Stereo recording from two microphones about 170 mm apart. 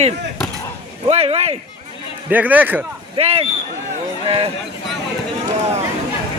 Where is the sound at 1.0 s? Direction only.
35° right (ahead or behind).